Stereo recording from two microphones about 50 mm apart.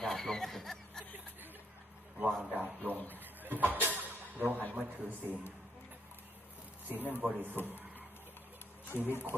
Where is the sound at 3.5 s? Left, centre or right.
Right.